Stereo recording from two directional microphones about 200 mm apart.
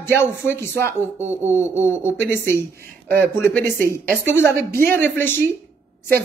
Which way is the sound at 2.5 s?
50° right (ahead or behind).